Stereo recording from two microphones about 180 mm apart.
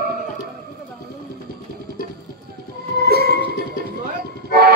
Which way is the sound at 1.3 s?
60° right (ahead or behind).